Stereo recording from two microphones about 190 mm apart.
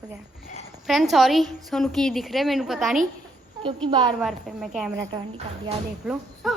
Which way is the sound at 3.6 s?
25° right (ahead or behind).